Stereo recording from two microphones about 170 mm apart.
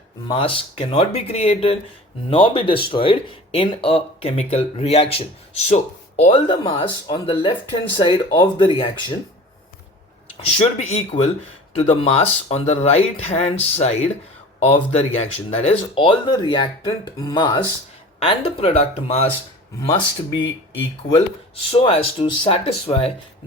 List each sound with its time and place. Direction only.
0.3 s speech: 30° left (ahead or behind)
10.4 s speech: 40° left (ahead or behind)
19.9 s speech: 25° left (ahead or behind)
21.5 s speech: 35° left (ahead or behind)